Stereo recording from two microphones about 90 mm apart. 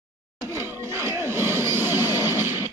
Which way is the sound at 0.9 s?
30° right (ahead or behind).